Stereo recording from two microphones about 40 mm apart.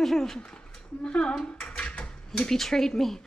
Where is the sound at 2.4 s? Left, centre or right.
Centre.